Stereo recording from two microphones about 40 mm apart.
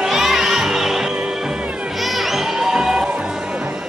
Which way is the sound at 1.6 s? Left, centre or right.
Right.